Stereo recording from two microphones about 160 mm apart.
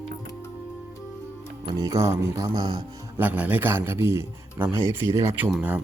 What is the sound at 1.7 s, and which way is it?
Speech, 20° right (ahead or behind).